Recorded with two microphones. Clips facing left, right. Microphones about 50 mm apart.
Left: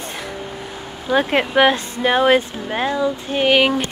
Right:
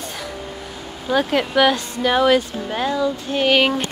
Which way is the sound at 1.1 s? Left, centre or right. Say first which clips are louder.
Left 2 dB; left.